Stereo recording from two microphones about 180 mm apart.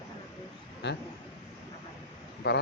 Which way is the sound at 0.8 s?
70° left (ahead or behind).